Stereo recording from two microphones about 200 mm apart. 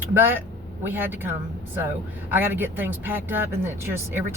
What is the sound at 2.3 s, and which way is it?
Speech, 10° right (ahead or behind).